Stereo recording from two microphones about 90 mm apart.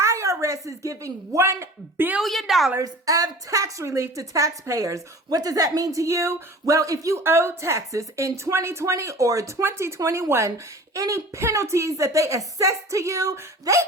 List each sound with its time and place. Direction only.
0.0 s speech: 35° right (ahead or behind)
2.2 s a woman's voice: centre (ahead or behind)
2.8 s a woman's voice: 40° right (ahead or behind)
7.2 s a woman's voice: 30° right (ahead or behind)